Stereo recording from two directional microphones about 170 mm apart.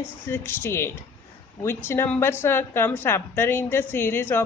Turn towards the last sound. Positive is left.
turn(degrees=10)  # may be behind; listen again after turning